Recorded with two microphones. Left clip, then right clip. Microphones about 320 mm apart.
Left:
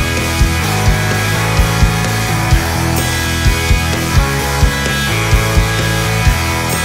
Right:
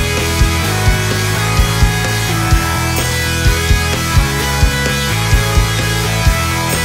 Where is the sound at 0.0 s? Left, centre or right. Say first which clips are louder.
Even; centre.